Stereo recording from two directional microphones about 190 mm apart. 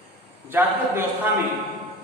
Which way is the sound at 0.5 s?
10° right (ahead or behind).